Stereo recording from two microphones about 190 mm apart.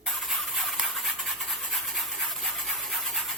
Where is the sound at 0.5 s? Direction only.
Centre (ahead or behind).